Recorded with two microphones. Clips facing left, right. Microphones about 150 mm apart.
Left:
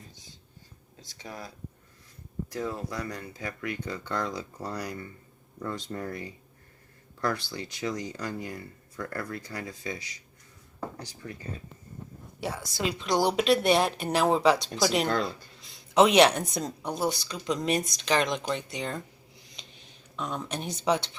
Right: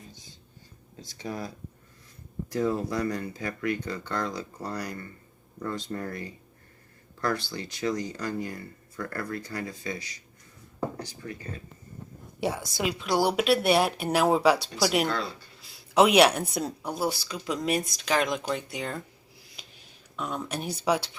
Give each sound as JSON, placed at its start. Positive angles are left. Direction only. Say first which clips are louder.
{"t": 1.2, "sound": "speech", "louder": "right 6 dB", "side_deg": -10}
{"t": 2.6, "sound": "speech", "louder": "right 7 dB", "side_deg": 5}
{"t": 11.2, "sound": "speech", "louder": "right 1 dB", "side_deg": 5}
{"t": 12.4, "sound": "speech", "louder": "right 3 dB", "side_deg": -15}
{"t": 19.5, "sound": "a sound", "louder": "even", "side_deg": -5}